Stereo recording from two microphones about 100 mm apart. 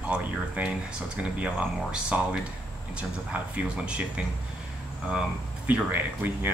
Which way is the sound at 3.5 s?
10° right (ahead or behind).